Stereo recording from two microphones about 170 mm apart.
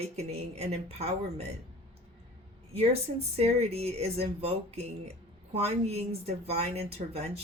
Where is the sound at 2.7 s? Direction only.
40° right (ahead or behind).